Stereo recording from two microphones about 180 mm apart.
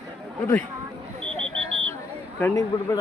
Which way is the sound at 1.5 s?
90° right.